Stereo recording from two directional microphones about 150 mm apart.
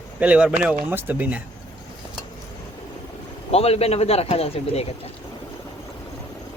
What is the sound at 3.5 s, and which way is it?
Speech, 40° left (ahead or behind).